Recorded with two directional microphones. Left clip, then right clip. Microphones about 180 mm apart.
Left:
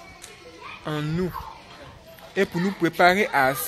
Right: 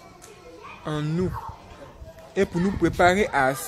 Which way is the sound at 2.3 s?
5° right (ahead or behind).